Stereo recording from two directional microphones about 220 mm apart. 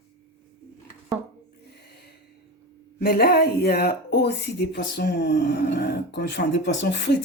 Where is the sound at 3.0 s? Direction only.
45° left (ahead or behind).